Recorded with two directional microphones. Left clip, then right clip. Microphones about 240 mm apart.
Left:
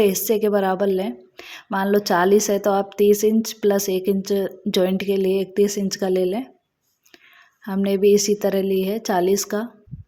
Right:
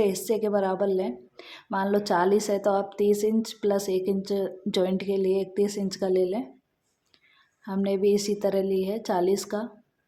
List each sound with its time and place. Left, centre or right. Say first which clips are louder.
0.0 s a woman's voice: left 6 dB; left
7.6 s a woman's voice: left 6 dB; left